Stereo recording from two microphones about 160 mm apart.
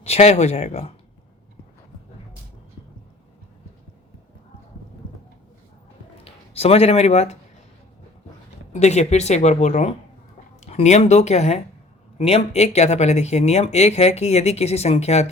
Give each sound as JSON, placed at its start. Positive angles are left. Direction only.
{"t": 0.0, "sound": "speech", "side_deg": 40}
{"t": 6.2, "sound": "speech", "side_deg": 40}
{"t": 8.7, "sound": "speech", "side_deg": 45}